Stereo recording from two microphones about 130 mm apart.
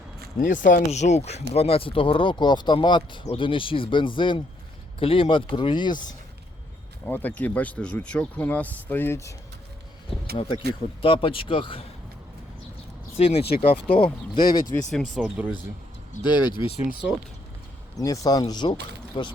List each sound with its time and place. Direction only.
0.3 s speech: 90° left
0.9 s speech: 60° left (ahead or behind); by 6.0 s 35° left (ahead or behind)
7.0 s speech: 15° left (ahead or behind)
10.1 s speech: 45° left (ahead or behind)
13.1 s speech: 55° left (ahead or behind); by 14.7 s 35° left (ahead or behind)
14.8 s speech: 5° left (ahead or behind)
16.2 s speech: 35° left (ahead or behind)
18.0 s speech: 25° left (ahead or behind)